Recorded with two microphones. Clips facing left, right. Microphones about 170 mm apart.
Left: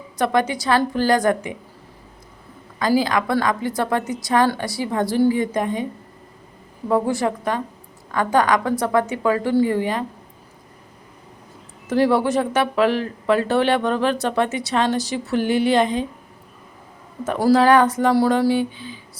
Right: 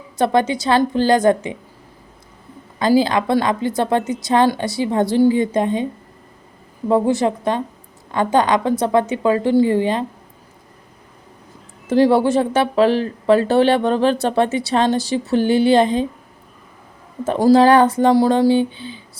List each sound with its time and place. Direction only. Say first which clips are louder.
0.2 s speech: right 3 dB; 25° right (ahead or behind)
2.7 s speech: right 4 dB; 30° right (ahead or behind)
6.8 s speech: right 4 dB; 25° right (ahead or behind)
11.9 s speech: right 4 dB; 30° right (ahead or behind)
17.2 s speech: right 3 dB; 25° right (ahead or behind)